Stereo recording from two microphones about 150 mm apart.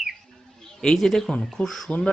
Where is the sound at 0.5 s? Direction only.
5° left (ahead or behind).